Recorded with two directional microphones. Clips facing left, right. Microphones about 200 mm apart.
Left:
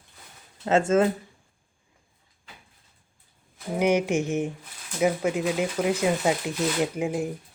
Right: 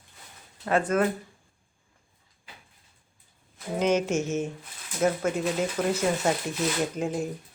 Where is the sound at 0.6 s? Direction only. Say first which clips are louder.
Left 3 dB; 25° left (ahead or behind).